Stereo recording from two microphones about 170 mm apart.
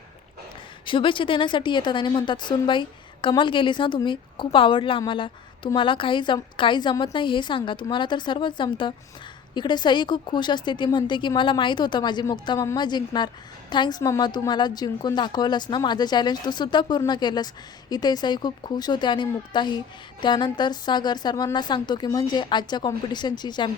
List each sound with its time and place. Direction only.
0.9 s a woman's voice: 30° left (ahead or behind)